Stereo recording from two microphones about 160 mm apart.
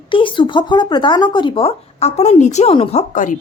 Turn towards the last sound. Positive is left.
turn(degrees=55)  # may be behind; listen again after turning